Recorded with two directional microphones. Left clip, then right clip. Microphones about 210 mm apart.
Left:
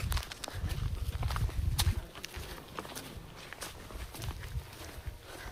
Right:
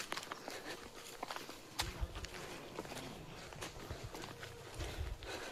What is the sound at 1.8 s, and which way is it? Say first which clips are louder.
Boat: left 6 dB; 45° left (ahead or behind).